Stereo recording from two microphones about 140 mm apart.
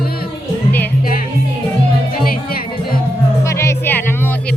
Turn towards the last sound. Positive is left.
turn(degrees=15)  # may be behind; listen again after turning